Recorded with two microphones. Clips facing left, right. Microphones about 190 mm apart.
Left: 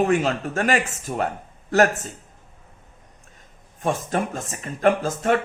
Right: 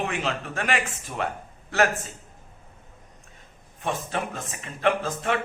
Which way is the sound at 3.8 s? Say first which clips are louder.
Left 5 dB; 45° left (ahead or behind).